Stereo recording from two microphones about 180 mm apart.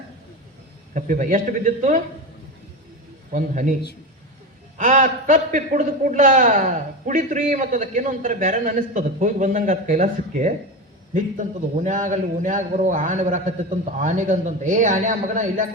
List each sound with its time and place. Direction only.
0.9 s a man's voice: 45° right (ahead or behind)
3.3 s a man's voice: 45° right (ahead or behind)
4.8 s a man's voice: 45° right (ahead or behind)